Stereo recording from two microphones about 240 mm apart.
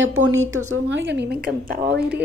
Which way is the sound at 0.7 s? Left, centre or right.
Right.